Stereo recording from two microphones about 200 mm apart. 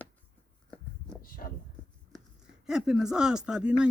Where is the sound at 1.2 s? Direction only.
45° left (ahead or behind).